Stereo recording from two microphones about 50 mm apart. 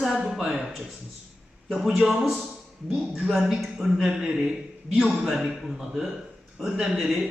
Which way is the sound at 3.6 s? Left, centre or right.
Centre.